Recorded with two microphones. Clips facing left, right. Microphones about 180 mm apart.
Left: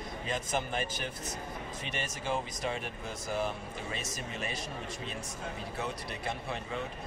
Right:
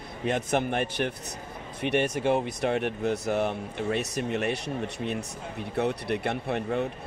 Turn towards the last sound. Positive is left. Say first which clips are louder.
# right 9 dB
turn(degrees=-60)  # may be behind; listen again after turning